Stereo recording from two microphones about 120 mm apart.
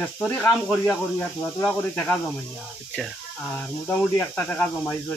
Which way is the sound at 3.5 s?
15° left (ahead or behind).